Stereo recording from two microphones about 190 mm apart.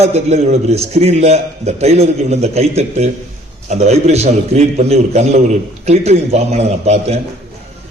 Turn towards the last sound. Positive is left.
turn(degrees=-35)  # may be behind; listen again after turning